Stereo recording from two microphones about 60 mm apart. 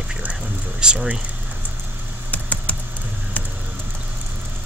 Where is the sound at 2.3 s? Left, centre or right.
Left.